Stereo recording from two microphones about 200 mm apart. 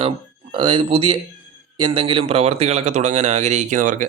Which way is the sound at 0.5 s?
25° right (ahead or behind).